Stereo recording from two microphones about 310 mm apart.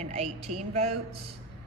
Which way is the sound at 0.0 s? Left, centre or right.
Centre.